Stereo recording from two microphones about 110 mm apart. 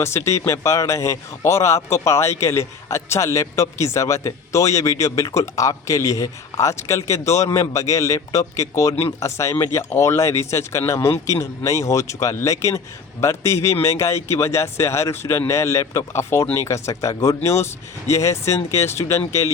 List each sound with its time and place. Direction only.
0.0 s a man's voice: 25° left (ahead or behind)